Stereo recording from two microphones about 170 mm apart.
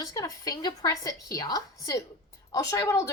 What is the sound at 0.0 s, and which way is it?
Speech, 20° left (ahead or behind).